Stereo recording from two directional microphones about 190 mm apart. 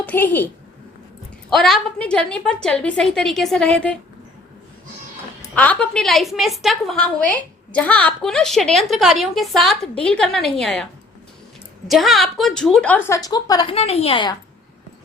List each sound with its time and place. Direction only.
0.0 s a woman's voice: 10° left (ahead or behind)
1.5 s a woman's voice: centre (ahead or behind)
5.4 s a woman's voice: 10° left (ahead or behind)
11.9 s a woman's voice: centre (ahead or behind)
13.1 s a woman's voice: 20° left (ahead or behind)